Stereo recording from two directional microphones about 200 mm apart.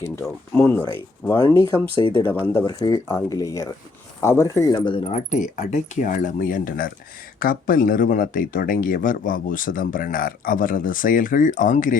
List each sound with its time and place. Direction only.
0.2 s speech: 10° left (ahead or behind)
2.0 s speech: 25° left (ahead or behind)
2.2 s speech: 10° left (ahead or behind); by 11.9 s 40° left (ahead or behind)